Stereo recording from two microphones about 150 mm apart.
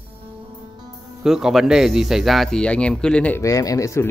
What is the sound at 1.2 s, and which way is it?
Speech, 5° right (ahead or behind).